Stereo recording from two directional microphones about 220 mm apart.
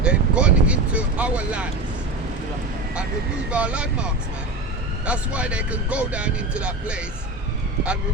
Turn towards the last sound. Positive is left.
turn(degrees=-5)  # may be behind; listen again after turning